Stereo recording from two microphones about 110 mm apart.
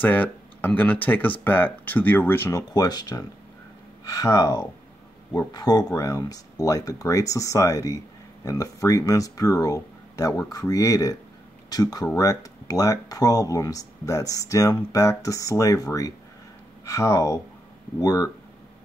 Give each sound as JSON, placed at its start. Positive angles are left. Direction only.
{"t": 0.0, "sound": "speech", "side_deg": 15}
{"t": 2.7, "sound": "speech", "side_deg": 35}